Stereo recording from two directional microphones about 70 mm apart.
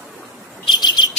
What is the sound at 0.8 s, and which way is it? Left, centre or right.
Bird, left.